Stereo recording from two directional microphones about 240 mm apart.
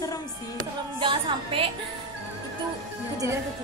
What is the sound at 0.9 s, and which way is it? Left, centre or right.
Speech, right.